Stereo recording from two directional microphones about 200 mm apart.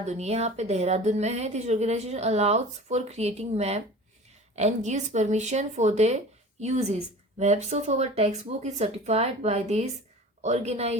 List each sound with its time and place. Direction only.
0.0 s speech: 35° right (ahead or behind)